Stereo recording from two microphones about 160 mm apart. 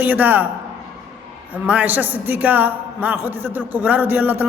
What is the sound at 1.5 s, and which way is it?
A man's voice, 10° right (ahead or behind).